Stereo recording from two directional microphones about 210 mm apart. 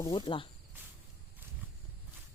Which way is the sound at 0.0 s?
20° left (ahead or behind).